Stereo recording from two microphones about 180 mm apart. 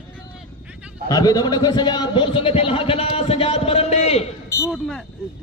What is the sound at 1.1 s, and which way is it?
A man's voice, 20° left (ahead or behind).